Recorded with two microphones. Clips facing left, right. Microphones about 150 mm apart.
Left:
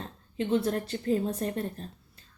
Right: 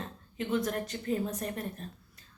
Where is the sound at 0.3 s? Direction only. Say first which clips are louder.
Left 4 dB; 30° left (ahead or behind).